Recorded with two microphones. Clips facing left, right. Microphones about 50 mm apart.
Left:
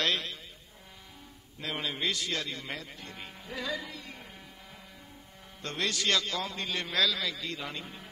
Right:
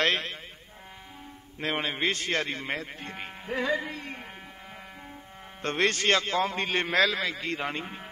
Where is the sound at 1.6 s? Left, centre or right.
Right.